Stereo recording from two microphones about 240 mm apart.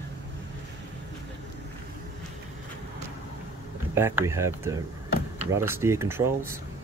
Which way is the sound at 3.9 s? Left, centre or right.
Centre.